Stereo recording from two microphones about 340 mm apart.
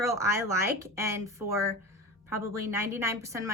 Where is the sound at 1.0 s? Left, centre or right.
Centre.